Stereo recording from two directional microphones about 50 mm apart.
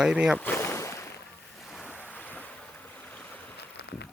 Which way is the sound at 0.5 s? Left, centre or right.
Left.